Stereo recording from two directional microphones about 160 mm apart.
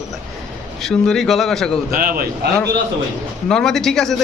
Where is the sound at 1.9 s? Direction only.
65° right (ahead or behind).